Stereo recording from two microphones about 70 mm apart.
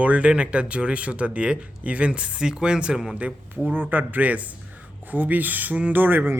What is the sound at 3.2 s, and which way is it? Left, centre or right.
A man's voice, right.